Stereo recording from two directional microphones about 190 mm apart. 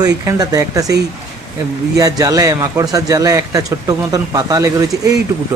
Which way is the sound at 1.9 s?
20° right (ahead or behind).